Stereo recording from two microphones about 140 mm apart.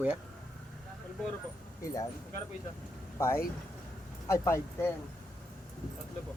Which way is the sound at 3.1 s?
20° left (ahead or behind).